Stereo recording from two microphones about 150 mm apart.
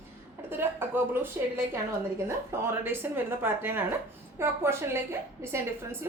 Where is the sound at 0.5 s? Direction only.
15° right (ahead or behind).